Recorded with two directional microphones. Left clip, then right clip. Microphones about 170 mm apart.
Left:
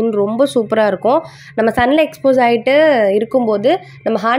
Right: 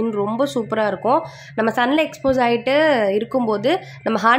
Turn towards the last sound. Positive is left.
turn(degrees=15)  # may be behind; listen again after turning